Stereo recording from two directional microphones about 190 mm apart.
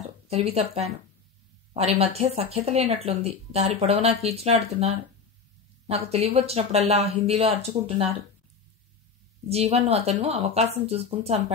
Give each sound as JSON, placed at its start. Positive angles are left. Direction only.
{"t": 0.3, "sound": "speech", "side_deg": -35}
{"t": 9.5, "sound": "speech", "side_deg": -35}